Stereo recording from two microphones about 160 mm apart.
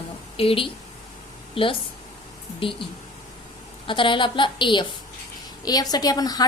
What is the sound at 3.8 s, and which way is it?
A woman's voice, 30° left (ahead or behind).